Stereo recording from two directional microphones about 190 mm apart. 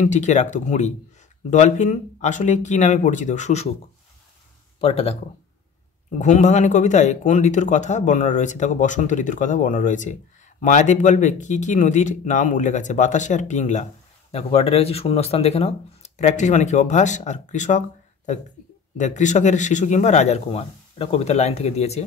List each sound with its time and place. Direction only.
0.0 s speech: 40° left (ahead or behind)
4.7 s speech: 30° left (ahead or behind)
6.1 s speech: 40° left (ahead or behind)